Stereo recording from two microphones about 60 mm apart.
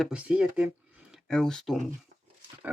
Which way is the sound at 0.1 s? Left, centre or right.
Centre.